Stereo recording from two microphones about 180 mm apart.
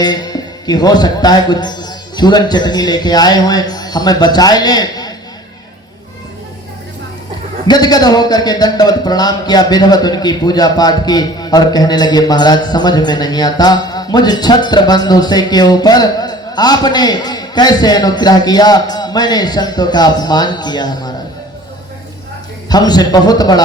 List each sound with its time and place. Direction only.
0.0 s speech: 20° left (ahead or behind)
7.7 s a man's voice: 20° left (ahead or behind)
22.7 s a man's voice: 20° left (ahead or behind)